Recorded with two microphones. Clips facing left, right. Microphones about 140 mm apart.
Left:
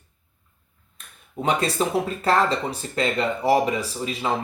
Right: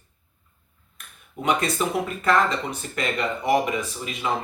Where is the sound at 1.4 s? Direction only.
30° left (ahead or behind).